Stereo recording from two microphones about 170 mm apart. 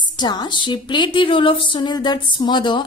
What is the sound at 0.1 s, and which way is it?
A woman's voice, 25° left (ahead or behind).